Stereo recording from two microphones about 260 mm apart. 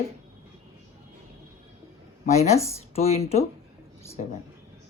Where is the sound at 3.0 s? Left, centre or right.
Left.